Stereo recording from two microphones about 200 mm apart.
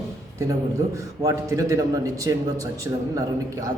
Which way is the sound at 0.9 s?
15° right (ahead or behind).